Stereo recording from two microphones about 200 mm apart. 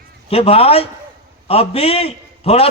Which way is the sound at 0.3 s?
30° left (ahead or behind).